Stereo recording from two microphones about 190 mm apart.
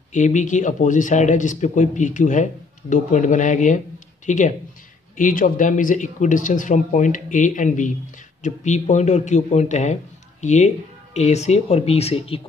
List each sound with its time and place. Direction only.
0.1 s speech: 40° left (ahead or behind)